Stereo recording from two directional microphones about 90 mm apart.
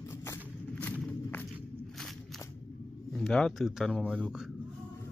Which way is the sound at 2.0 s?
5° left (ahead or behind).